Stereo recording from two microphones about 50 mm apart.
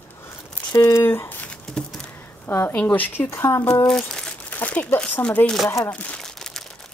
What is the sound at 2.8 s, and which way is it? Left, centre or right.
Speech, left.